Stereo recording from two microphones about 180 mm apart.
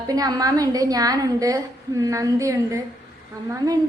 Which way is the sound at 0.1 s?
20° right (ahead or behind).